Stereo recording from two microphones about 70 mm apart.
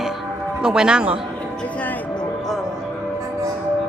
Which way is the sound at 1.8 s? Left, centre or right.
Left.